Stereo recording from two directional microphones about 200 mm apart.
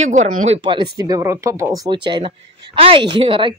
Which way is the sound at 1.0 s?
15° right (ahead or behind).